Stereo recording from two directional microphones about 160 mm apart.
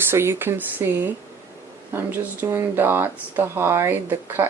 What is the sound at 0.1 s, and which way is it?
Speech, 15° right (ahead or behind).